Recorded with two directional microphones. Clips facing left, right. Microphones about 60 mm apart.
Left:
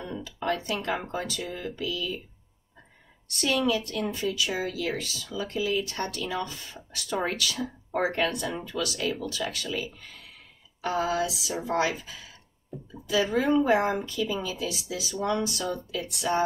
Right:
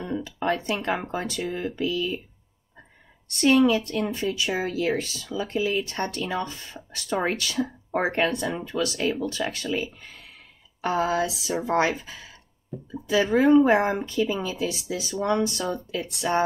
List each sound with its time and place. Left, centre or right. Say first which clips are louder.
0.0 s a sound: right 4 dB; right
1.1 s speech: right 4 dB; right
3.3 s speech: right 7 dB; right